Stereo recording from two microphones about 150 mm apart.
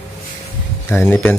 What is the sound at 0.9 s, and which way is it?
Speech, 15° left (ahead or behind).